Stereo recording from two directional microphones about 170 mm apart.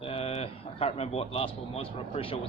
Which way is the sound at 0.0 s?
35° left (ahead or behind).